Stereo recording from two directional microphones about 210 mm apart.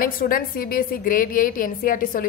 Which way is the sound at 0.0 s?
45° left (ahead or behind).